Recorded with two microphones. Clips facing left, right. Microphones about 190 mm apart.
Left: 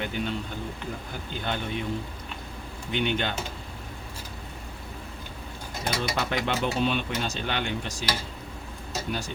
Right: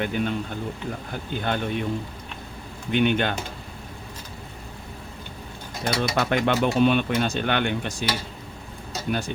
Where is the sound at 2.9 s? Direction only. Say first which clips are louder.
Right 6 dB; 55° right (ahead or behind).